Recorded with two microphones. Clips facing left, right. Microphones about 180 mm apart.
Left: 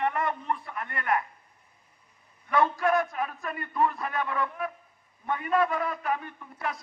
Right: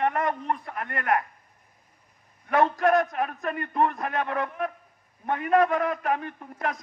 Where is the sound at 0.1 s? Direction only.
40° right (ahead or behind).